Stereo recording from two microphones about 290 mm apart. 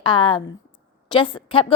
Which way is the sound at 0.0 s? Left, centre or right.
Centre.